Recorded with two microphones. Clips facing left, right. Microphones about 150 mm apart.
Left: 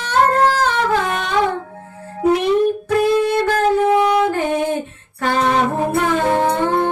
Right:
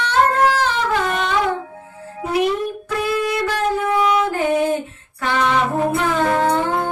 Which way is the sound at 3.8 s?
35° left (ahead or behind).